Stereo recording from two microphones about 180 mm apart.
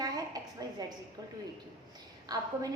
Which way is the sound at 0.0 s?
20° right (ahead or behind).